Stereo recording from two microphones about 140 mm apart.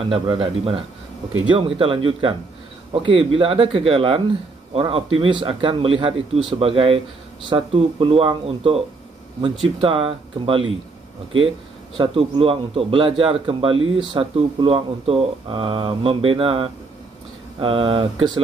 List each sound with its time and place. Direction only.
0.0 s speech: 40° right (ahead or behind)
12.0 s speech: 40° right (ahead or behind)